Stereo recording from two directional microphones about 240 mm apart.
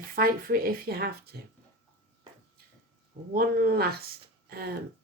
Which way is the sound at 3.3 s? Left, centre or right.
Right.